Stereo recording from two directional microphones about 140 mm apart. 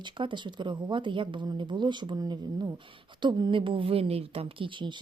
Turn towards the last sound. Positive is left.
turn(degrees=-40)  # may be behind; listen again after turning